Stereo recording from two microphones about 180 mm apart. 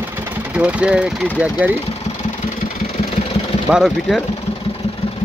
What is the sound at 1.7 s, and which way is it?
Engine, 35° left (ahead or behind).